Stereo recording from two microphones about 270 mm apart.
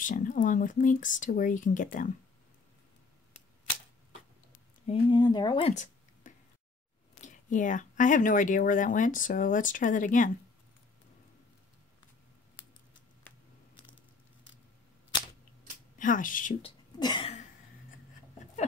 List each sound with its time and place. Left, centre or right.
0.0 s speech: left
4.8 s speech: centre
16.0 s speech: left
17.0 s a sound: centre